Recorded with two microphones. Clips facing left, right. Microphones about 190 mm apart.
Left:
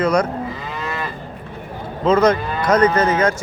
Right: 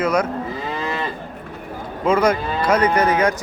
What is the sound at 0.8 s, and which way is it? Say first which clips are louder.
Cattle: even; 25° right (ahead or behind).